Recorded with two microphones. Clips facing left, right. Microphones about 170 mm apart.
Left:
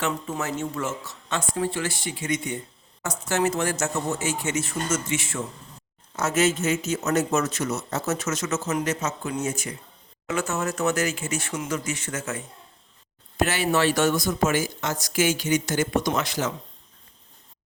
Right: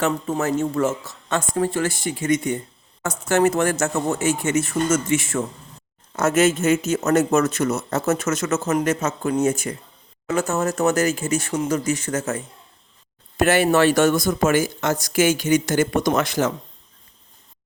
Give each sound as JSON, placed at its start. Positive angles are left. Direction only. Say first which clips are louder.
{"t": 0.0, "sound": "speech", "louder": "right 6 dB", "side_deg": -40}
{"t": 10.2, "sound": "speech", "louder": "right 5 dB", "side_deg": -40}
{"t": 13.3, "sound": "speech", "louder": "right 6 dB", "side_deg": -50}